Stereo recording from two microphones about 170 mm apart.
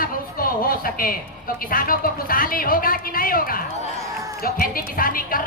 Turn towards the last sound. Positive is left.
turn(degrees=55)  # may be behind; listen again after turning